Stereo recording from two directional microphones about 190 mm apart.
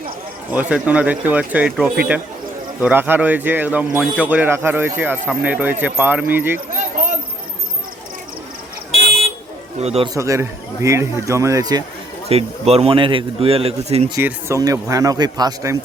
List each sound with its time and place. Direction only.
0.5 s speech: 5° right (ahead or behind)
6.7 s basketball bounce: 45° right (ahead or behind)
9.8 s a man's voice: 30° right (ahead or behind)
10.2 s speech: 15° right (ahead or behind)
12.3 s a man's voice: 30° right (ahead or behind)
14.2 s speech: 10° right (ahead or behind)